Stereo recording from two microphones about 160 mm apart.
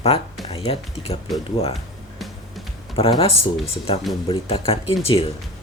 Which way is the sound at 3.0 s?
35° left (ahead or behind).